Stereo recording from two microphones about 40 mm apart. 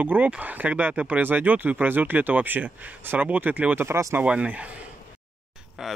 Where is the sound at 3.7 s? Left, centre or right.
Right.